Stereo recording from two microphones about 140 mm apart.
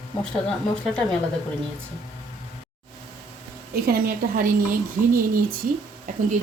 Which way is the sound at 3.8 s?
90° right.